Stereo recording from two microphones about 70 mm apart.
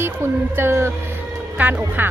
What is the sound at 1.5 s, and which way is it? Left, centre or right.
Speech, right.